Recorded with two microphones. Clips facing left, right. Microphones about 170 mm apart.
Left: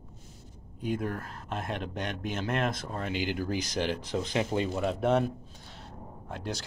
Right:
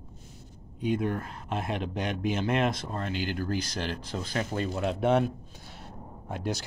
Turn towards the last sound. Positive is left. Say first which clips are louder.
# right 4 dB
turn(degrees=-15)  # may be behind; listen again after turning